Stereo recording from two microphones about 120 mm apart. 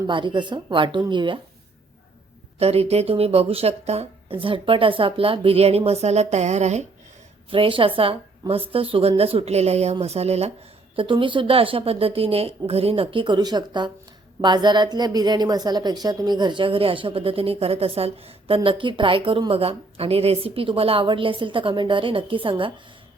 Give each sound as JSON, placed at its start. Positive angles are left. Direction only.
{"t": 0.1, "sound": "speech", "side_deg": -40}
{"t": 2.6, "sound": "speech", "side_deg": -60}
{"t": 7.5, "sound": "speech", "side_deg": -45}
{"t": 10.9, "sound": "a woman's voice", "side_deg": -45}